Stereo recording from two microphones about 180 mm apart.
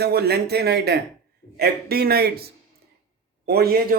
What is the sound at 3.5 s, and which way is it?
Speech, 60° right (ahead or behind).